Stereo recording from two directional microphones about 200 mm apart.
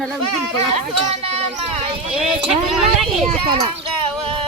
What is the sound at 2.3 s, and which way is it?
Speech, 5° right (ahead or behind).